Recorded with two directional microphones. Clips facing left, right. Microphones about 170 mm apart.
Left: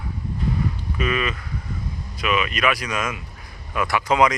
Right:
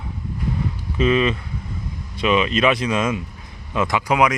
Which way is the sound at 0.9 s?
25° right (ahead or behind).